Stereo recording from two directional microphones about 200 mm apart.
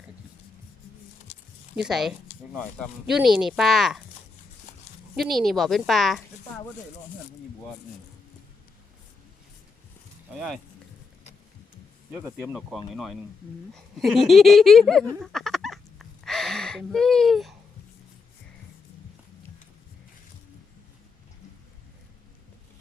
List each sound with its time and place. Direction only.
1.7 s speech: centre (ahead or behind)
5.1 s speech: centre (ahead or behind)
10.3 s speech: centre (ahead or behind)
12.1 s speech: 5° right (ahead or behind)
15.2 s fowl: centre (ahead or behind)